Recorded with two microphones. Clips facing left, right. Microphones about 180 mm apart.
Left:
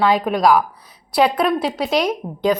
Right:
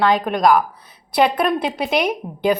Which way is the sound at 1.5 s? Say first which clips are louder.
Left 1 dB; 10° right (ahead or behind).